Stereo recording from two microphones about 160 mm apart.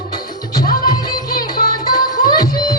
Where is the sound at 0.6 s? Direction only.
65° left (ahead or behind).